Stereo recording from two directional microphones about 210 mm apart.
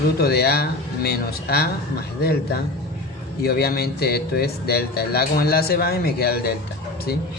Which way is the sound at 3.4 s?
50° left (ahead or behind).